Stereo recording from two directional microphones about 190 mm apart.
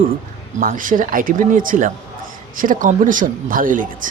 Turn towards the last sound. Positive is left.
turn(degrees=-45)  # may be behind; listen again after turning